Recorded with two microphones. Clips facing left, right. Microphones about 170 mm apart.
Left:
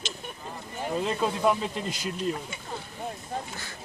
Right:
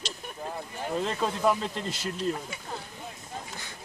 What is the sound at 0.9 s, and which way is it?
Speech, 5° left (ahead or behind).